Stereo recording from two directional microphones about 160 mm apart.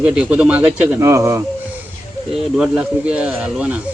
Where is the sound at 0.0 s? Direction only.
5° right (ahead or behind).